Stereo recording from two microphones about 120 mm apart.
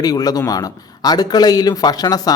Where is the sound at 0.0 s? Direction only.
30° left (ahead or behind).